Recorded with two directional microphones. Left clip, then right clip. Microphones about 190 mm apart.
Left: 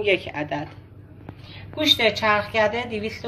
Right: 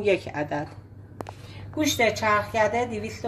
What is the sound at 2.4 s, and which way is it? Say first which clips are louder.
Speech: left 1 dB; 45° right (ahead or behind).